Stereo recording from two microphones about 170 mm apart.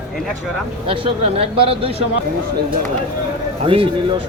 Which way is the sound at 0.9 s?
35° right (ahead or behind).